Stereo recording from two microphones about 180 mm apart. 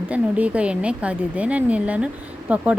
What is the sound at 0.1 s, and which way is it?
A woman's voice, 5° right (ahead or behind).